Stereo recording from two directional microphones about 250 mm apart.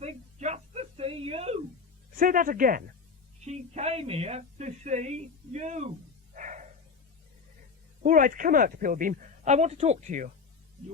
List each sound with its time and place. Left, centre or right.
0.0 s whimper: right
2.1 s speech: right
6.3 s a sound: right
8.0 s speech: right